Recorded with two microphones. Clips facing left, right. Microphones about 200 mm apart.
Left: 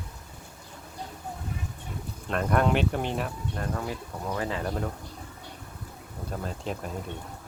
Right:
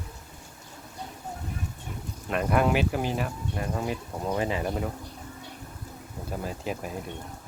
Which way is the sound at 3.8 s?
20° right (ahead or behind).